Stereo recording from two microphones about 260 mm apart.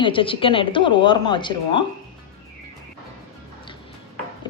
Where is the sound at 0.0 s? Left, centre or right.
Centre.